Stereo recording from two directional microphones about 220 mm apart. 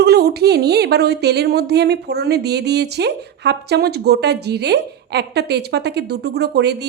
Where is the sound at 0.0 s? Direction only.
45° right (ahead or behind).